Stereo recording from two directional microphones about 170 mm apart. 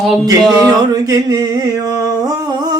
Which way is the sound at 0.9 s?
20° right (ahead or behind).